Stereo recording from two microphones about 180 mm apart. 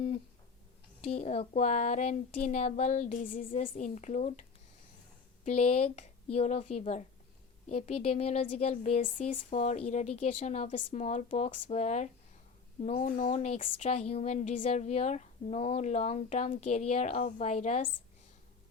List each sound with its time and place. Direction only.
1.0 s speech: 35° left (ahead or behind)
5.5 s speech: 35° left (ahead or behind)